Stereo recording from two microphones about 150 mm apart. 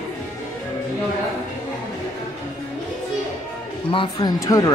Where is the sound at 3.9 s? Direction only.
30° left (ahead or behind).